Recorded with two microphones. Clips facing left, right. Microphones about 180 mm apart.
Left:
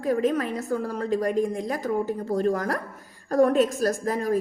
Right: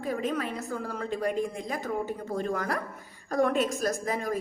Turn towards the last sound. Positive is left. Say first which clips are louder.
# left 5 dB
turn(degrees=40)  # may be behind; listen again after turning